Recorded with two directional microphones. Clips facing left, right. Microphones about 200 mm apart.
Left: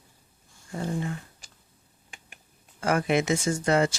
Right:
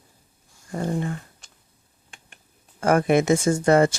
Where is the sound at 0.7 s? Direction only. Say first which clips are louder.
Right 4 dB; 50° right (ahead or behind).